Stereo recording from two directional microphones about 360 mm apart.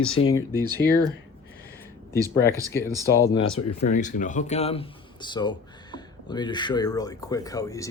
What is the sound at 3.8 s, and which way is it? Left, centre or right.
Speech, left.